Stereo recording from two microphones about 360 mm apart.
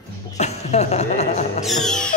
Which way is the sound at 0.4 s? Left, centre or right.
Centre.